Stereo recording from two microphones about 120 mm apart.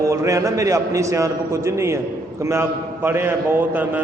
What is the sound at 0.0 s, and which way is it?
A man's voice, 25° right (ahead or behind).